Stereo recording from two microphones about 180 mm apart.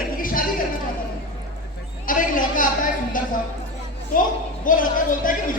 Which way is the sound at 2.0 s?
50° left (ahead or behind).